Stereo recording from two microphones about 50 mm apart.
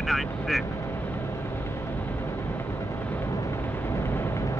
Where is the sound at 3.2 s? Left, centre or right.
Left.